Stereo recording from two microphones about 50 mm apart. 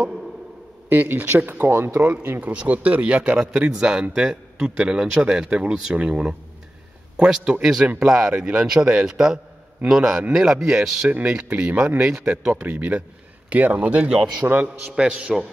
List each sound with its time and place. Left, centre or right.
0.8 s speech: right
2.4 s speech: right
8.0 s speech: centre
12.0 s speech: centre
12.3 s speech: right